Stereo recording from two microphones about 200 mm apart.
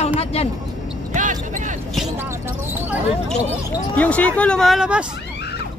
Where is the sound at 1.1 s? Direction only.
40° right (ahead or behind).